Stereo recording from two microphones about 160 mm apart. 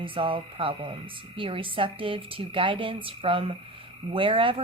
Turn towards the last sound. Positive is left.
turn(degrees=-35)  # may be behind; listen again after turning